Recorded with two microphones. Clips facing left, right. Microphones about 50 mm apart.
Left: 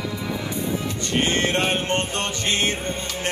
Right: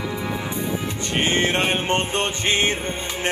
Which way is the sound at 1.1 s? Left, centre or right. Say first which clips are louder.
Right 1 dB; centre.